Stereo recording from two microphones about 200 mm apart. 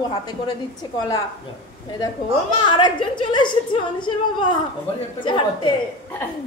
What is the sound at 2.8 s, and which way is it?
Speech, 25° left (ahead or behind).